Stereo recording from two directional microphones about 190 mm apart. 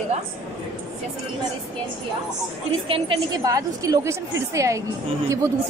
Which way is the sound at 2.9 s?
25° right (ahead or behind).